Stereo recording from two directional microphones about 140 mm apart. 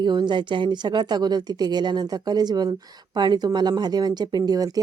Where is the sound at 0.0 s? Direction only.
35° right (ahead or behind).